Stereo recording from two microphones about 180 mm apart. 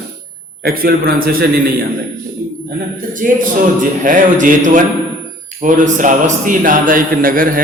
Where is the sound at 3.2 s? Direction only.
50° right (ahead or behind).